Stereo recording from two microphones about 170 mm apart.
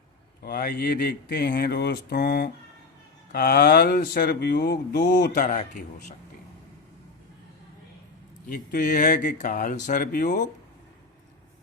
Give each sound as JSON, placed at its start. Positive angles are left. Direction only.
{"t": 0.4, "sound": "speech", "side_deg": 60}
{"t": 8.4, "sound": "speech", "side_deg": 55}